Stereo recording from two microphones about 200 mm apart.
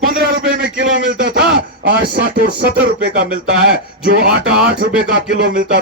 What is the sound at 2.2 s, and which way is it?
A man's voice, 50° right (ahead or behind).